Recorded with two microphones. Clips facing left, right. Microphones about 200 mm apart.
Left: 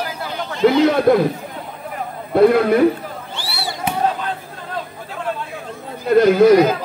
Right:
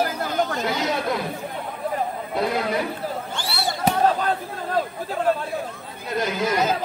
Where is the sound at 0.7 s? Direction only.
55° left (ahead or behind).